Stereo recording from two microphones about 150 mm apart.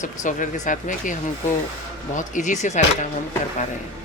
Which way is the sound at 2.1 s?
55° left (ahead or behind).